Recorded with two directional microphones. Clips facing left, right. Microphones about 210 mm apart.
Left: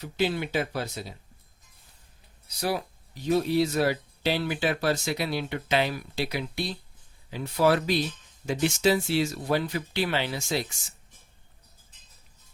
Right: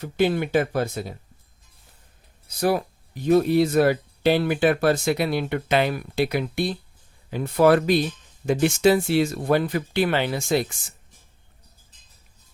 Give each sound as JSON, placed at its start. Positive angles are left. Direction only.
{"t": 0.0, "sound": "speech", "side_deg": -50}
{"t": 2.5, "sound": "speech", "side_deg": -50}